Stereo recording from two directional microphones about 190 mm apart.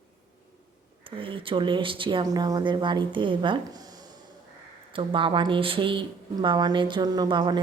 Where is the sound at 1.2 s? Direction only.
30° right (ahead or behind).